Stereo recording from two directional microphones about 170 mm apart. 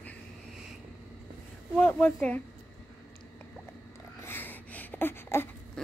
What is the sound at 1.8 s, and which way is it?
Speech, 10° left (ahead or behind).